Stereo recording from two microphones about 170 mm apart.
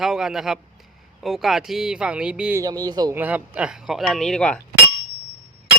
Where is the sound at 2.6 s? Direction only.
20° right (ahead or behind).